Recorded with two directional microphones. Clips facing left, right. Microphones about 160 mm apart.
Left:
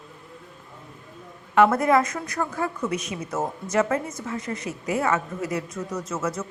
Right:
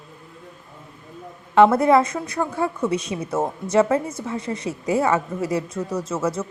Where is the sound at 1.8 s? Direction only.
30° right (ahead or behind).